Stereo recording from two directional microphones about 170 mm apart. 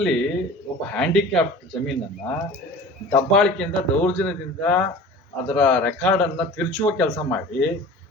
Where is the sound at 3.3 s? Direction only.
5° left (ahead or behind).